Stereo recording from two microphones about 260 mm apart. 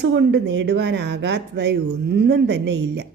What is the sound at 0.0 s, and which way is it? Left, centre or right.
Speech, right.